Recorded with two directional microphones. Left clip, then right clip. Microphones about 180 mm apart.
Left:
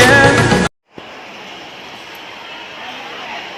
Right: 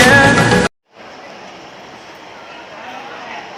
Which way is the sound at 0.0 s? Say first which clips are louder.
Even; centre (ahead or behind).